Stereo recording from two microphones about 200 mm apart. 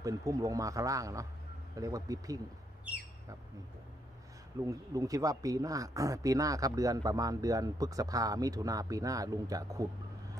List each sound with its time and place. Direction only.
0.0 s speech: 15° right (ahead or behind)
4.6 s speech: 15° right (ahead or behind)